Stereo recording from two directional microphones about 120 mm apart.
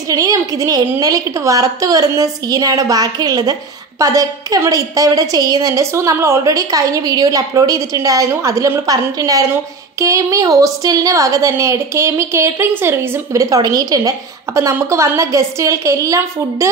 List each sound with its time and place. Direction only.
0.1 s a woman's voice: 30° right (ahead or behind)